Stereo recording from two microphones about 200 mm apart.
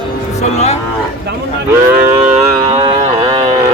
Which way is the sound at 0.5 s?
35° left (ahead or behind).